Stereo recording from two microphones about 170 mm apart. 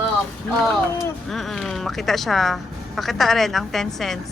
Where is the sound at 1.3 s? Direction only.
Centre (ahead or behind).